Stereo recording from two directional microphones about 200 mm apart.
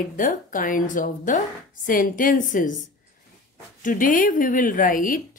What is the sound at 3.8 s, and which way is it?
Speech, 40° left (ahead or behind).